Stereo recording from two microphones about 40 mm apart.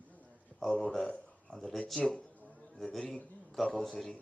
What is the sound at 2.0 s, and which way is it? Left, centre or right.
Speech, left.